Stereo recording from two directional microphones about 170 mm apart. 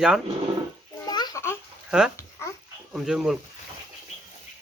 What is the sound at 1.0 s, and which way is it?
Babbling, 25° left (ahead or behind).